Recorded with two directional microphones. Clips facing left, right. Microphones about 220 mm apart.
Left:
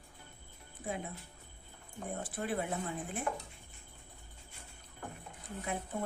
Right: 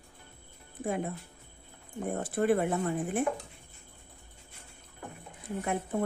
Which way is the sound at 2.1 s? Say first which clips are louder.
Right 10 dB; 60° right (ahead or behind).